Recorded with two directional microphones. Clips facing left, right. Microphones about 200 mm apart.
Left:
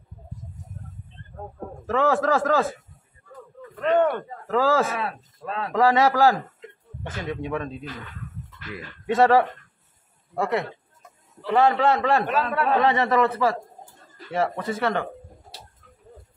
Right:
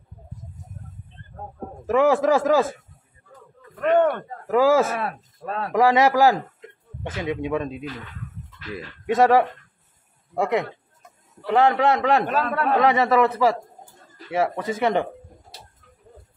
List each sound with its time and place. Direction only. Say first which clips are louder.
1.9 s a man's voice: right 4 dB; 15° right (ahead or behind)
3.8 s speech: right 2 dB; 50° right (ahead or behind)
4.5 s a man's voice: right 4 dB; 15° right (ahead or behind)
4.8 s speech: right 2 dB; 50° right (ahead or behind)
5.7 s a man's voice: right 2 dB; 15° right (ahead or behind)
9.0 s a man's voice: right 1 dB; 15° right (ahead or behind)